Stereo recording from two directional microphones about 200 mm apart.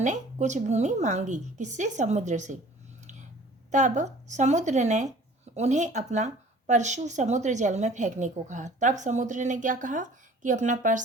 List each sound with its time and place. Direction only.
0.0 s speech: 35° right (ahead or behind)
3.0 s a sound: 35° right (ahead or behind)
3.7 s speech: 35° right (ahead or behind)